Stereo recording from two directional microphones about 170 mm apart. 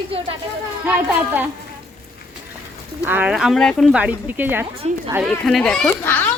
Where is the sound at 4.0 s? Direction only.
10° right (ahead or behind).